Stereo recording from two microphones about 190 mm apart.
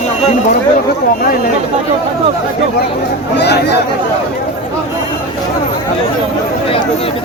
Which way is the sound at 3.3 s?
60° left (ahead or behind).